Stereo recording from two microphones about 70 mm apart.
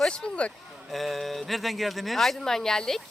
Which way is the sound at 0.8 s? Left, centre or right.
Centre.